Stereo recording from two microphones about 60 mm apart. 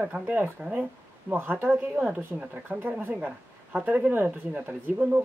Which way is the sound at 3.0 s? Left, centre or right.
Right.